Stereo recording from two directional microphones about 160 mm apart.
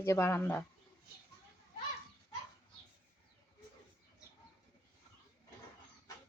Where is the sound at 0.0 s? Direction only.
15° left (ahead or behind).